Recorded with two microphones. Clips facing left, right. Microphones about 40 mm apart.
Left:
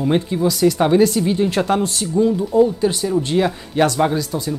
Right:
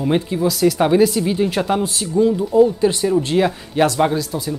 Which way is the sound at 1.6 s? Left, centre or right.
Centre.